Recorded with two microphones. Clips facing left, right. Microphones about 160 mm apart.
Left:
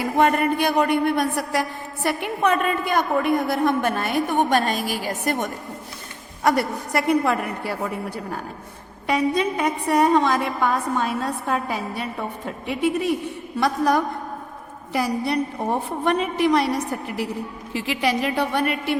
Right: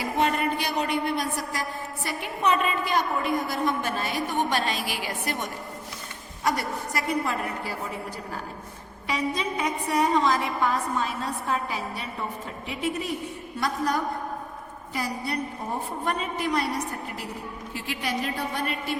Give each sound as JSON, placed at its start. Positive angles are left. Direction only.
{"t": 0.0, "sound": "a woman's voice", "side_deg": 55}
{"t": 6.4, "sound": "a woman's voice", "side_deg": 60}
{"t": 9.0, "sound": "a woman's voice", "side_deg": 55}
{"t": 13.6, "sound": "a woman's voice", "side_deg": 80}
{"t": 17.7, "sound": "a woman's voice", "side_deg": 90}